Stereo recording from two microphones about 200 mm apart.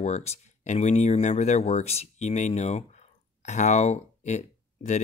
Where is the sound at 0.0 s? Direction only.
35° left (ahead or behind).